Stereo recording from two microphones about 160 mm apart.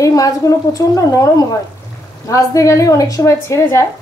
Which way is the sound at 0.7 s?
20° left (ahead or behind).